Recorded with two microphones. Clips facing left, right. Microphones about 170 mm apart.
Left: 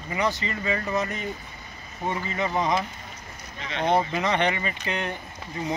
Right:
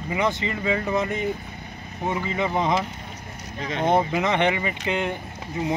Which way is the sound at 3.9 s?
20° right (ahead or behind).